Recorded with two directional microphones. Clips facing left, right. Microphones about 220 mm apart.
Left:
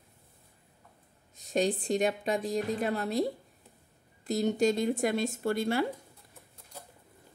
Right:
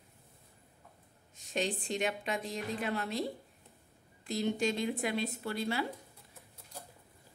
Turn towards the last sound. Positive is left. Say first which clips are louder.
# left 6 dB
turn(degrees=50)  # may be behind; listen again after turning